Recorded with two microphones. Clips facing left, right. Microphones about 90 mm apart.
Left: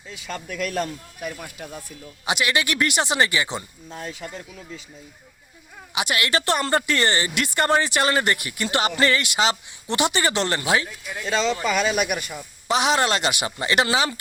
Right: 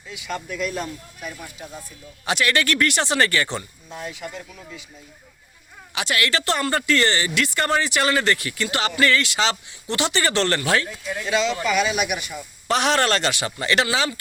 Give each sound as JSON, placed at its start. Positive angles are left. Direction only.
{"t": 0.1, "sound": "speech", "side_deg": 40}
{"t": 0.6, "sound": "speech", "side_deg": 60}
{"t": 2.2, "sound": "speech", "side_deg": 10}
{"t": 4.0, "sound": "speech", "side_deg": 35}
{"t": 5.9, "sound": "speech", "side_deg": 15}
{"t": 11.3, "sound": "speech", "side_deg": 35}
{"t": 12.6, "sound": "speech", "side_deg": 5}